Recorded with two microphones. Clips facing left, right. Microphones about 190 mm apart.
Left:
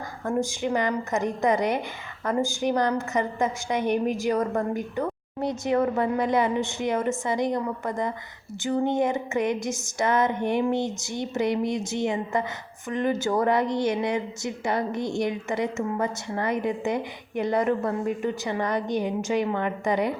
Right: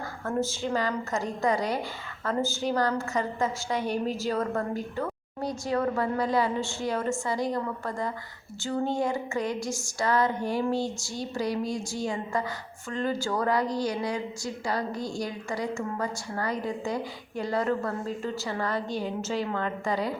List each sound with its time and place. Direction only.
0.3 s a woman's voice: 15° left (ahead or behind)